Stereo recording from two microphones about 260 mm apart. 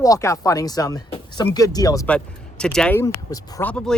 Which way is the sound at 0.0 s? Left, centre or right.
Centre.